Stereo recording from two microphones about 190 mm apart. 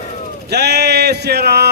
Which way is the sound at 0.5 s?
60° right (ahead or behind).